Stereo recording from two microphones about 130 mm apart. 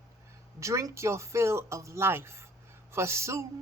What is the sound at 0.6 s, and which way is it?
A woman's voice, 25° right (ahead or behind).